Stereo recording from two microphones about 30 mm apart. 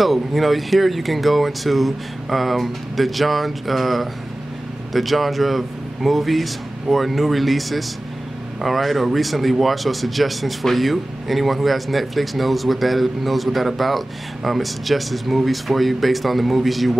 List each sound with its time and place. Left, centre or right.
0.0 s speech: centre